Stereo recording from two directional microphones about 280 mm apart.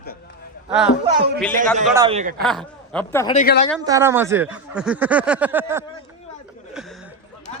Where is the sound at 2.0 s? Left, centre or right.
Right.